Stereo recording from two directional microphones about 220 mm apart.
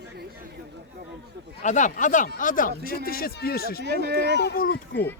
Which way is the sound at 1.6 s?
35° left (ahead or behind).